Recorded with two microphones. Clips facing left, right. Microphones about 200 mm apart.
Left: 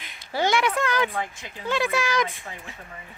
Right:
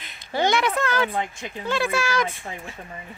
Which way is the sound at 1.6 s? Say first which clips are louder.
Even; 15° left (ahead or behind).